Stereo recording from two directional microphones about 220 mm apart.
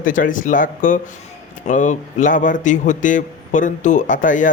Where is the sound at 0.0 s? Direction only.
35° left (ahead or behind).